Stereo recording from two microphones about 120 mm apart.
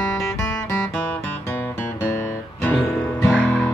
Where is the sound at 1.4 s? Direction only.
20° left (ahead or behind).